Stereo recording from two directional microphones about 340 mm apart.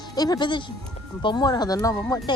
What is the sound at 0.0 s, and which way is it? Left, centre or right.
Speech, centre.